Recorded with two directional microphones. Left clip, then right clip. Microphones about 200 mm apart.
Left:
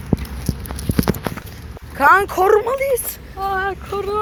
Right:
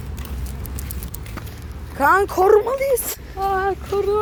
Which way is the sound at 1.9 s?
10° right (ahead or behind).